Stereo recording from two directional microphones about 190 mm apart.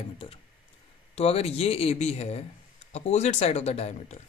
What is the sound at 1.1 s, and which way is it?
A woman's voice, 30° left (ahead or behind).